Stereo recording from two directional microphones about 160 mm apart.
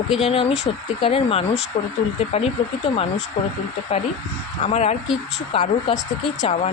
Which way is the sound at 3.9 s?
40° left (ahead or behind).